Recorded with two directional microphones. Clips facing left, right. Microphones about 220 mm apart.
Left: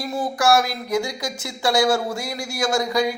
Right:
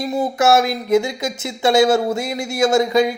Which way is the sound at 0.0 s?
20° right (ahead or behind).